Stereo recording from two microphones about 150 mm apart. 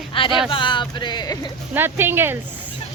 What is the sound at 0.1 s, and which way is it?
Speech, 35° left (ahead or behind).